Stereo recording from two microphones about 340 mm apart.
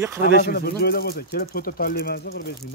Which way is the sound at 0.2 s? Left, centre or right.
Left.